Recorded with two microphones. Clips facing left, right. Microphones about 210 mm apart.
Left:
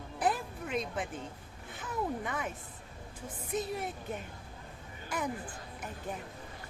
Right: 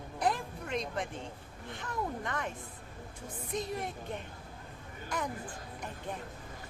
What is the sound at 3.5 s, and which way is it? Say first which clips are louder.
Speech: left 1 dB; 5° left (ahead or behind).